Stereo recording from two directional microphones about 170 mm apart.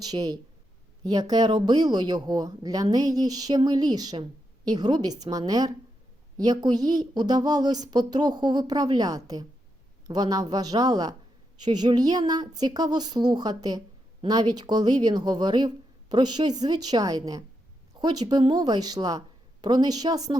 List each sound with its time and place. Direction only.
0.0 s a woman's voice: 20° right (ahead or behind)